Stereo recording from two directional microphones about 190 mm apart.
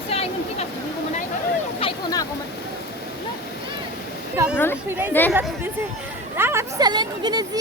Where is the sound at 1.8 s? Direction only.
25° left (ahead or behind).